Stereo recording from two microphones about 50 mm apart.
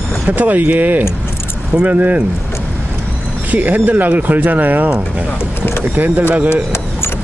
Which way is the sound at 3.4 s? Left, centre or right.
Right.